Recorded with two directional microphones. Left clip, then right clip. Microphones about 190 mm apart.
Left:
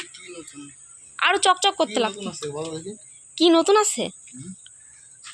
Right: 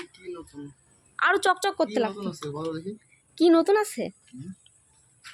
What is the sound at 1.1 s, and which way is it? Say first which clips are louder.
A woman's voice: left 3 dB; 15° right (ahead or behind).